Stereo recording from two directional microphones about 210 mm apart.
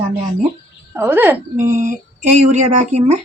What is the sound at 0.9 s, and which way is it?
Speech, 10° right (ahead or behind).